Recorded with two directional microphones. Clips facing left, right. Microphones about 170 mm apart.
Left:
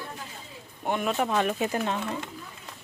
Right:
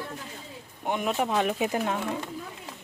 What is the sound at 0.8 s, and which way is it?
Speech, 15° right (ahead or behind).